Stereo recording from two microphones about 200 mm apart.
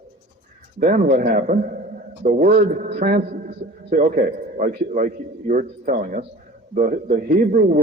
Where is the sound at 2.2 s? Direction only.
55° right (ahead or behind).